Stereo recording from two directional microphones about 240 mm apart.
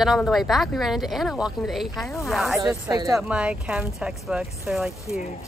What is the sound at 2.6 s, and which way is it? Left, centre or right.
Speech, centre.